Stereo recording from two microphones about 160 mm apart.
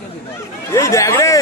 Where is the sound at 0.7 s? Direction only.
20° left (ahead or behind).